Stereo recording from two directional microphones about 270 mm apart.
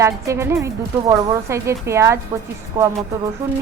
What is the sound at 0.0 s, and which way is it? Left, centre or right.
Speech, centre.